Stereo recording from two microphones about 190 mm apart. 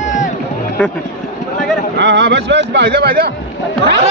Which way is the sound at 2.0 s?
65° right (ahead or behind).